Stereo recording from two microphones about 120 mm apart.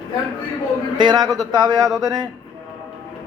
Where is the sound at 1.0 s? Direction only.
35° right (ahead or behind).